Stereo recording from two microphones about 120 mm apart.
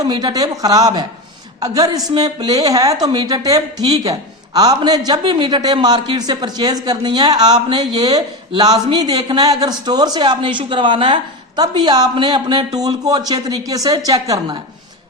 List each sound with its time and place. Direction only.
0.0 s speech: 35° right (ahead or behind)